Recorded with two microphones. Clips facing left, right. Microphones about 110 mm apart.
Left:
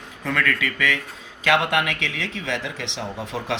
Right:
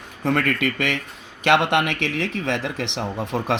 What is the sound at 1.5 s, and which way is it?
Speech, 25° right (ahead or behind).